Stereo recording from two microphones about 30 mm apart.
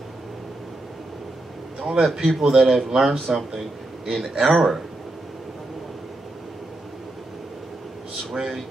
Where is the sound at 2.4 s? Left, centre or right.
Centre.